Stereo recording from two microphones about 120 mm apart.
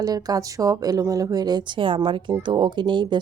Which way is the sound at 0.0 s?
30° right (ahead or behind).